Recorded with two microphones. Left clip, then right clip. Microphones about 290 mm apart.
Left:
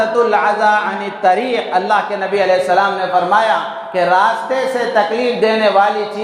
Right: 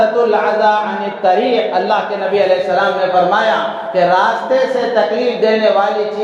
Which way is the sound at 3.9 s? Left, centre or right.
Left.